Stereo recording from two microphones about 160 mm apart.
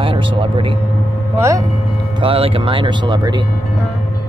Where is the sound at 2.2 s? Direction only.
35° right (ahead or behind).